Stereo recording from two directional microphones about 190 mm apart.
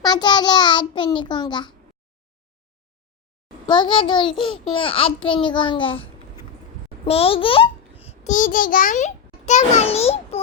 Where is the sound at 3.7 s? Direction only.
25° left (ahead or behind).